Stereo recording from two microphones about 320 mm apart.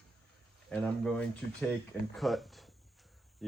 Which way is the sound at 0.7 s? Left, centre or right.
Centre.